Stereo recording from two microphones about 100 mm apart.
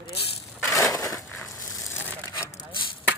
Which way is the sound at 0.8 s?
35° left (ahead or behind).